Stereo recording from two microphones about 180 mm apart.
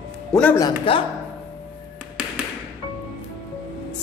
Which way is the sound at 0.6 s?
30° left (ahead or behind).